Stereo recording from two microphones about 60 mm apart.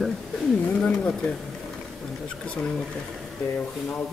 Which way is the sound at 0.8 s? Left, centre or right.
Centre.